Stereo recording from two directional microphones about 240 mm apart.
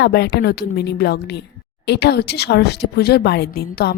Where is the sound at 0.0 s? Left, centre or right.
Left.